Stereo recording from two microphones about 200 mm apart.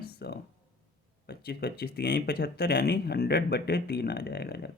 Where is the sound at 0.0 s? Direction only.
55° left (ahead or behind).